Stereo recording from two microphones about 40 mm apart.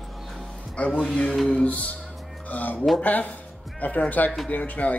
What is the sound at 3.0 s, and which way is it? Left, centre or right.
Speech, left.